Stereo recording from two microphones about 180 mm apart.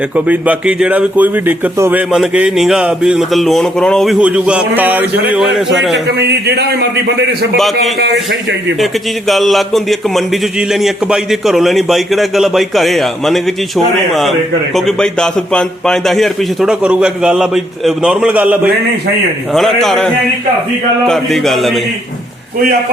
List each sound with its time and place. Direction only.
0.3 s a man's voice: 5° right (ahead or behind)
6.1 s a man's voice: 70° right (ahead or behind)
7.9 s a man's voice: 75° right (ahead or behind)
8.8 s a man's voice: centre (ahead or behind)
21.1 s a man's voice: centre (ahead or behind)